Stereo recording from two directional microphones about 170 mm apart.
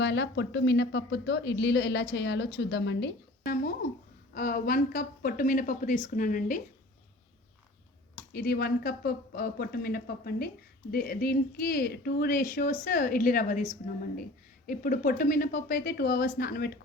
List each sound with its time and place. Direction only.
0.0 s a woman's voice: 90° left; by 6.6 s 50° left (ahead or behind)
8.3 s speech: 65° left (ahead or behind)
14.7 s speech: 55° left (ahead or behind)